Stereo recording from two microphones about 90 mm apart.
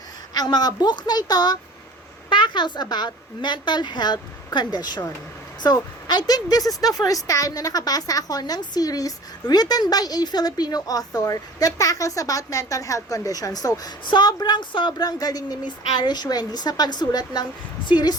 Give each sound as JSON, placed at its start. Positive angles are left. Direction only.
{"t": 0.3, "sound": "a woman's voice", "side_deg": 50}
{"t": 2.3, "sound": "a sound", "side_deg": 60}
{"t": 2.9, "sound": "a woman's voice", "side_deg": 55}
{"t": 14.9, "sound": "a woman's voice", "side_deg": 45}